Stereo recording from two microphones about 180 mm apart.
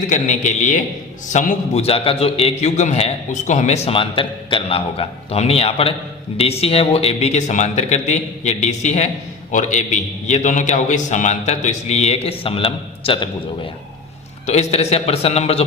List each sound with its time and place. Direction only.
0.1 s a man's voice: 40° left (ahead or behind)
14.4 s a man's voice: 40° left (ahead or behind)